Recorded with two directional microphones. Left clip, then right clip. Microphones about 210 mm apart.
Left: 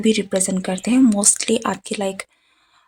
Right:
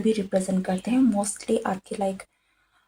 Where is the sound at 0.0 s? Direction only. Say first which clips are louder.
Left 5 dB; 40° left (ahead or behind).